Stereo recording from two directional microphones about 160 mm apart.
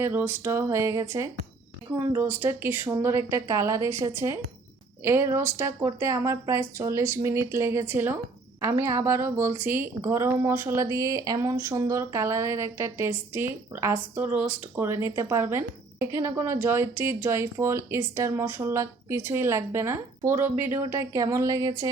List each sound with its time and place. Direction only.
0.0 s a woman's voice: 15° right (ahead or behind)